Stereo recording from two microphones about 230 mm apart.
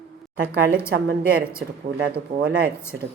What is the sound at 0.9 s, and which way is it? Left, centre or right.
Speech, right.